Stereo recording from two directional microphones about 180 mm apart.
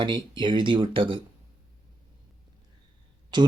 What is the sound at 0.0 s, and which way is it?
Speech, 25° right (ahead or behind).